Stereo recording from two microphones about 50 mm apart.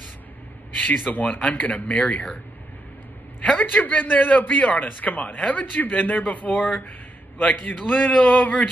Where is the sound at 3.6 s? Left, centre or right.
Left.